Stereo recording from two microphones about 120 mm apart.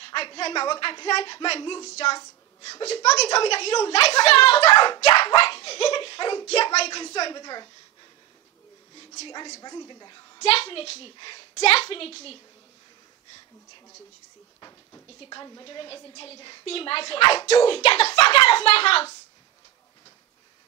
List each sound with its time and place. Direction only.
0.0 s a woman's voice: 50° left (ahead or behind)
1.9 s a woman's voice: 60° left (ahead or behind)
4.7 s a woman's voice: 35° left (ahead or behind)
5.1 s a woman's voice: 50° left (ahead or behind)
7.3 s a woman's voice: 35° left (ahead or behind)
9.6 s a woman's voice: 35° left (ahead or behind)
10.4 s a woman's voice: 55° left (ahead or behind)
11.5 s a woman's voice: 55° left (ahead or behind)
14.6 s a sound: 25° left (ahead or behind)
15.1 s a woman's voice: 35° left (ahead or behind); by 18.2 s 55° left (ahead or behind)
18.2 s a child's voice: 45° left (ahead or behind)